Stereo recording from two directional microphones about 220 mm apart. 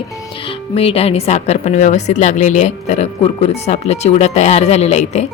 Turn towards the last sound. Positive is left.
turn(degrees=30)  # may be behind; listen again after turning